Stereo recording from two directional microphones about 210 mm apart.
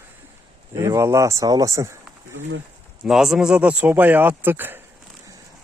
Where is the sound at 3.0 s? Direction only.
Centre (ahead or behind).